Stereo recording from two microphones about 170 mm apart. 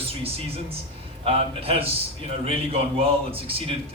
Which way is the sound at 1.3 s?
35° right (ahead or behind).